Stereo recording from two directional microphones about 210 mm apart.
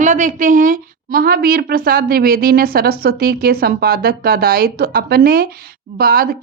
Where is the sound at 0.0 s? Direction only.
35° right (ahead or behind).